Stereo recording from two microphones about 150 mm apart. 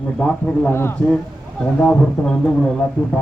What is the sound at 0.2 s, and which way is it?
A man's voice, 10° left (ahead or behind).